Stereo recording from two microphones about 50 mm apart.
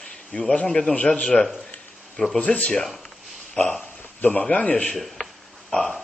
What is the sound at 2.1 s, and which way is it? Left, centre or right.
Speech, centre.